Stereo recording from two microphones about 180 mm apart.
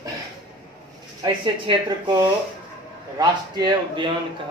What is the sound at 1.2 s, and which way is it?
Speech, 25° right (ahead or behind).